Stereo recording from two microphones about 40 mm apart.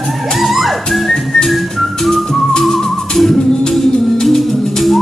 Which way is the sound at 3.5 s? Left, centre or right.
Centre.